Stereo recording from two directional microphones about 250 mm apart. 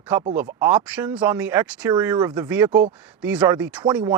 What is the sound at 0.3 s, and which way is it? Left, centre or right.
Speech, centre.